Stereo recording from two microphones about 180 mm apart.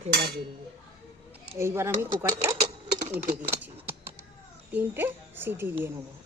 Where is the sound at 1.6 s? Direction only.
15° right (ahead or behind).